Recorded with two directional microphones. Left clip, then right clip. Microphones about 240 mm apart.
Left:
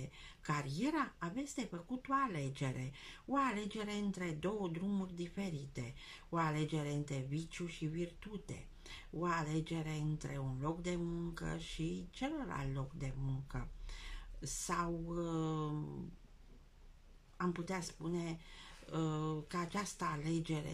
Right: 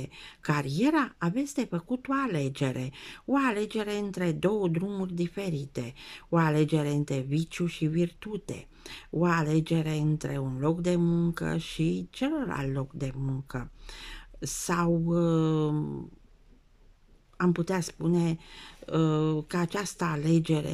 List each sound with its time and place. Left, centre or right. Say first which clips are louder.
0.0 s a woman's voice: right 12 dB; right
17.4 s a woman's voice: right 12 dB; right